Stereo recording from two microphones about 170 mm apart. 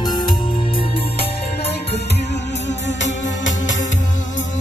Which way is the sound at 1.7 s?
75° left (ahead or behind).